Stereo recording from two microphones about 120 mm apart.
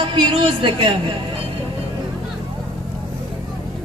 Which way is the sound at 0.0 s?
40° right (ahead or behind).